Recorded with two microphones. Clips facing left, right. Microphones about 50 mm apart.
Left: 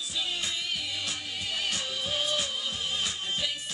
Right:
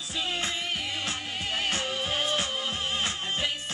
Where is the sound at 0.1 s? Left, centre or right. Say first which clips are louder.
Right 3 dB; right.